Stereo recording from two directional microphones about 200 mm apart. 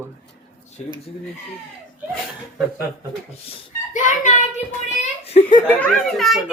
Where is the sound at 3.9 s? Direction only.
40° left (ahead or behind).